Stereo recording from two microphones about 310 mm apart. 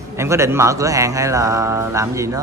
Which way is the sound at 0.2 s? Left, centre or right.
Centre.